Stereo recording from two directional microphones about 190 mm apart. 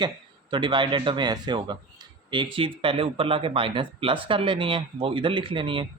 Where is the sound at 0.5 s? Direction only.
25° right (ahead or behind).